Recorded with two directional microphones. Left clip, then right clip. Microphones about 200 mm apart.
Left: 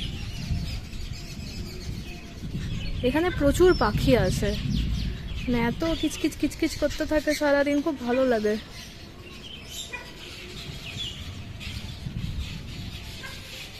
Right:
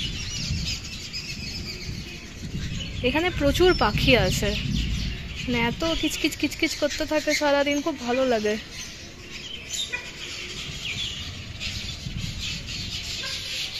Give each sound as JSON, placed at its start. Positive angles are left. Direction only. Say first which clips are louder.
{"t": 3.0, "sound": "speech", "louder": "right 1 dB", "side_deg": 15}
{"t": 5.5, "sound": "speech", "louder": "right 2 dB", "side_deg": 15}